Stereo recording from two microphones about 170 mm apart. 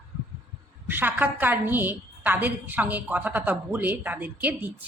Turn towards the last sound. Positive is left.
turn(degrees=-10)  # may be behind; listen again after turning